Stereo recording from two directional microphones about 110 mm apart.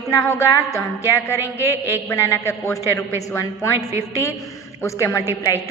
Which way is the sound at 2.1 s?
25° left (ahead or behind).